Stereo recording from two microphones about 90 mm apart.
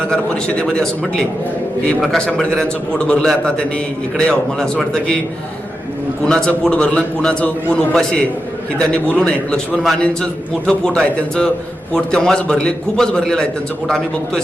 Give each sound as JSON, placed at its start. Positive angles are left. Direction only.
{"t": 0.0, "sound": "a man's voice", "side_deg": 10}
{"t": 6.2, "sound": "a man's voice", "side_deg": 10}